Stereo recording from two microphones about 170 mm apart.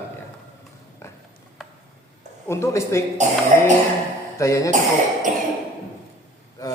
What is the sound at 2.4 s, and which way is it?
Mantra, 15° left (ahead or behind).